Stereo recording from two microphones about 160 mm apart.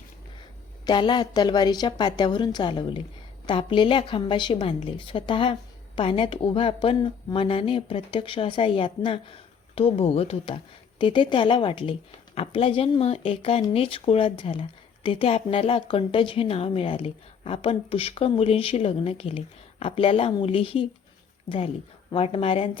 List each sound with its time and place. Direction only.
0.9 s a woman's voice: 30° left (ahead or behind)
22.1 s speech: 35° left (ahead or behind)